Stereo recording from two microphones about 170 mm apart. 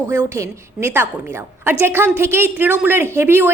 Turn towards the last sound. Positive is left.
turn(degrees=-15)  # may be behind; listen again after turning